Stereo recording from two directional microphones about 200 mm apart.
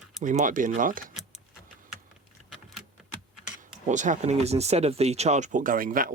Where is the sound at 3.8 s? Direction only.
40° right (ahead or behind).